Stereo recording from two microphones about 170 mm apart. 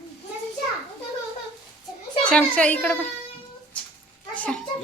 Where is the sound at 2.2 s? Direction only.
5° left (ahead or behind).